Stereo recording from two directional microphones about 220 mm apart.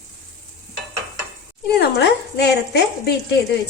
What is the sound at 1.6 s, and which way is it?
Speech, 50° left (ahead or behind).